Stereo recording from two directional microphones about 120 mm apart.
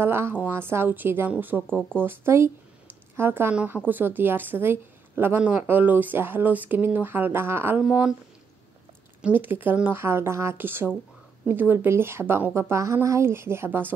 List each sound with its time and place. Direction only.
0.0 s speech: 20° right (ahead or behind)
1.7 s speech: 5° left (ahead or behind)
2.0 s speech: 20° right (ahead or behind)
7.8 s speech: 5° right (ahead or behind)
9.2 s a woman's voice: 15° right (ahead or behind)